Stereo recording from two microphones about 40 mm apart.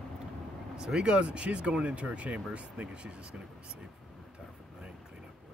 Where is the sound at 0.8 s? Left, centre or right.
Right.